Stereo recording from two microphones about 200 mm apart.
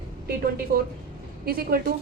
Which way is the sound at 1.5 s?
50° right (ahead or behind).